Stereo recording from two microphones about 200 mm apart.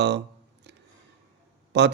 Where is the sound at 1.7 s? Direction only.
60° right (ahead or behind).